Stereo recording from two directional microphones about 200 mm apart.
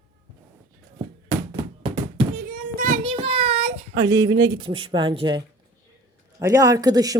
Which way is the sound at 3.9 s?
20° right (ahead or behind).